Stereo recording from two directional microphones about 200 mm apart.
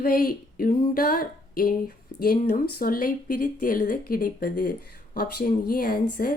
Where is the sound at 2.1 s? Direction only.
45° left (ahead or behind).